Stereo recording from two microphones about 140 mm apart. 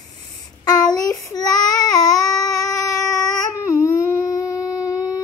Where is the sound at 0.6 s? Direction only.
30° left (ahead or behind).